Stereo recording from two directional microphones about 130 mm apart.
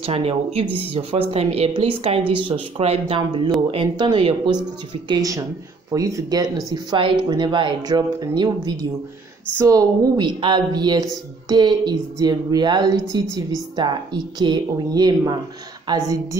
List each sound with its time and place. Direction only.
0.0 s a woman's voice: 45° right (ahead or behind)
3.2 s speech: 35° right (ahead or behind)